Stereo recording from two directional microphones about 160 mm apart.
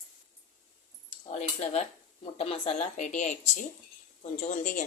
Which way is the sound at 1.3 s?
45° left (ahead or behind).